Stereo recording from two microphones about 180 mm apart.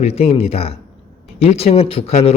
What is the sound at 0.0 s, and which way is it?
Speech, 35° left (ahead or behind).